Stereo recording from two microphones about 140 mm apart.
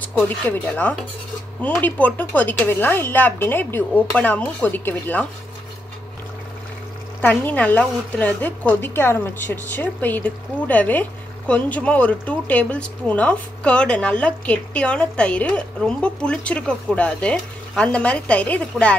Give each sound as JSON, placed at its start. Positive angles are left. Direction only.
{"t": 0.0, "sound": "a woman's voice", "side_deg": 10}
{"t": 7.2, "sound": "a woman's voice", "side_deg": 10}